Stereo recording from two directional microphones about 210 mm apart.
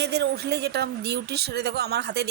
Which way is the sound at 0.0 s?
55° right (ahead or behind).